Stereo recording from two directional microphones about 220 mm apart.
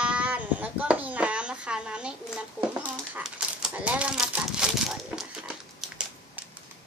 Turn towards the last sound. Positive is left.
turn(degrees=0)  # may be behind; listen again after turning